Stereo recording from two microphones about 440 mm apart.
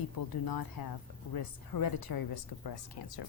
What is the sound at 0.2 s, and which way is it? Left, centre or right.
Speech, left.